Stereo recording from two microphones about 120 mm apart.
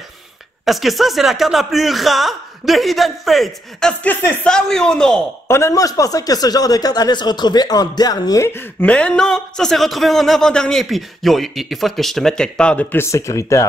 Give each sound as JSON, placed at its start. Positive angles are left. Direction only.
{"t": 0.7, "sound": "speech", "side_deg": 0}
{"t": 4.0, "sound": "speech", "side_deg": 15}
{"t": 5.5, "sound": "speech", "side_deg": 25}
{"t": 8.5, "sound": "speech", "side_deg": 15}
{"t": 12.9, "sound": "speech", "side_deg": 25}